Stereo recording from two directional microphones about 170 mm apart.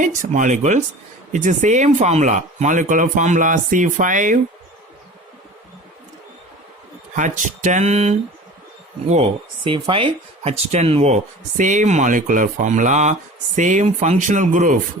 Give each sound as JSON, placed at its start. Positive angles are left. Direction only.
{"t": 0.0, "sound": "speech", "side_deg": -45}
{"t": 7.2, "sound": "speech", "side_deg": -50}